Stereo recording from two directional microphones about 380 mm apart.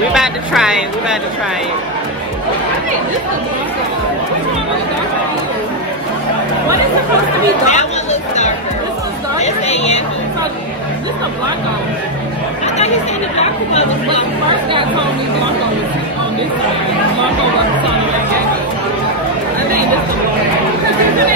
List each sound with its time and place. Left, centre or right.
0.1 s speech: centre
7.6 s chatter: centre
9.4 s a woman's voice: centre
13.4 s speech: centre